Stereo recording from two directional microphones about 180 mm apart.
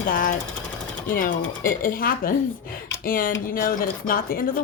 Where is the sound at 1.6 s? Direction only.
50° left (ahead or behind).